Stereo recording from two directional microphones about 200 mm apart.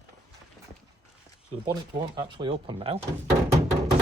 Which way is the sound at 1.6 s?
20° right (ahead or behind).